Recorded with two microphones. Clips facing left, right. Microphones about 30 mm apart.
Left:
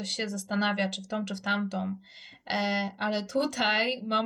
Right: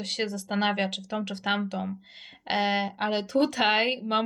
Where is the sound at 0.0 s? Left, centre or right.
Right.